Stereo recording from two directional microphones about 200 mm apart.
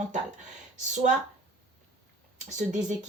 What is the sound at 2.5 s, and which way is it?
Speech, 40° right (ahead or behind).